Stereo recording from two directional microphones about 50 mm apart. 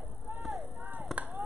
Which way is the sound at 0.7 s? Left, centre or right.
Right.